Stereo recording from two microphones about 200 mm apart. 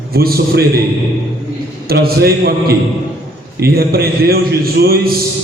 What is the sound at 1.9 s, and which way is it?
A man's voice, 50° right (ahead or behind).